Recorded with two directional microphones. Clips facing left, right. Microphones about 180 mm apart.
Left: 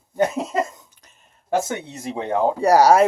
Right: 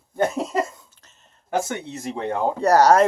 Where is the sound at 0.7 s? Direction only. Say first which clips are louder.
Left 1 dB; 15° left (ahead or behind).